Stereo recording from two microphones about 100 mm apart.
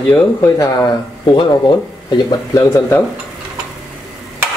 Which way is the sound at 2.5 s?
30° left (ahead or behind).